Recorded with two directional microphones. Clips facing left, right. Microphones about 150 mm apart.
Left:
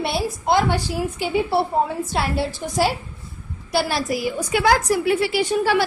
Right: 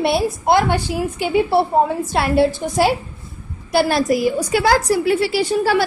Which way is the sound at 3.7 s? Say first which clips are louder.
Right 5 dB; 50° right (ahead or behind).